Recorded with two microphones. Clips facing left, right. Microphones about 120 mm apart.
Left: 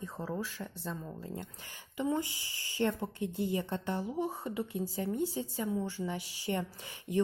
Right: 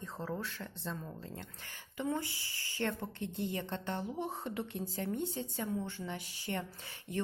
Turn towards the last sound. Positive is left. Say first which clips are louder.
# left 7 dB
turn(degrees=10)  # may be behind; listen again after turning